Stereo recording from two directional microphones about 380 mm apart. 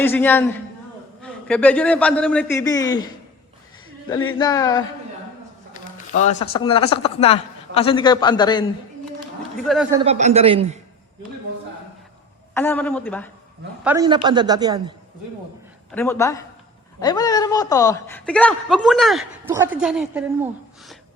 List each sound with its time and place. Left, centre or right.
0.0 s a man's voice: centre
4.4 s a man's voice: centre
6.1 s a man's voice: centre
9.6 s a man's voice: centre
10.0 s a man's voice: centre
12.5 s a man's voice: centre
13.8 s a man's voice: centre
15.9 s a man's voice: centre